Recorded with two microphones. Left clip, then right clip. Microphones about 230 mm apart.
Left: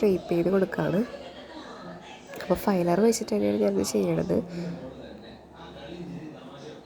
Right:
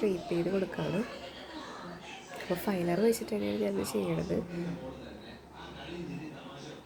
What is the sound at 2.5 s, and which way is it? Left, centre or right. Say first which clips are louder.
Speech: left 8 dB; left.